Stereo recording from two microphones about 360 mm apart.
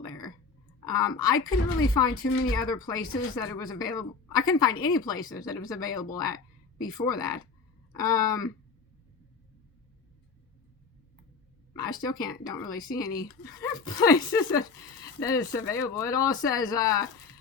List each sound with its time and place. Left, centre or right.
0.9 s speech: centre
2.6 s speech: centre
3.0 s speech: left
3.3 s speech: centre
11.7 s a sound: centre
12.0 s speech: centre